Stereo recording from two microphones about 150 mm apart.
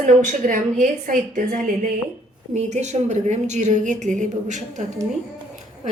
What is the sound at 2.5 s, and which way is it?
A woman's voice, 50° right (ahead or behind).